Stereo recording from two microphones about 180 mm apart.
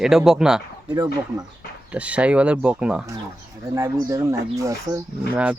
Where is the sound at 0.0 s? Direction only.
5° right (ahead or behind).